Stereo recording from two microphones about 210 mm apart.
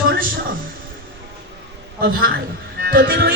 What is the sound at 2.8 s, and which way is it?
Music, 45° right (ahead or behind).